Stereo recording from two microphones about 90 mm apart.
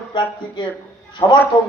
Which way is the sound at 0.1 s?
60° left (ahead or behind).